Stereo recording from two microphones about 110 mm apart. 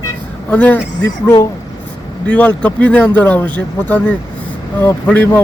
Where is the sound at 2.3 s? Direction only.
10° left (ahead or behind).